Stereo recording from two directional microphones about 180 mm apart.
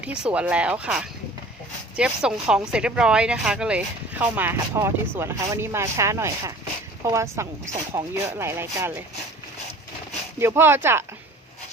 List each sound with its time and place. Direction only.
0.0 s speech: 5° right (ahead or behind)
10.3 s speech: 15° right (ahead or behind)